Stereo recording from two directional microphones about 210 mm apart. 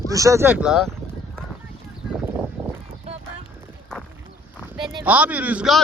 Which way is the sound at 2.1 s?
5° right (ahead or behind).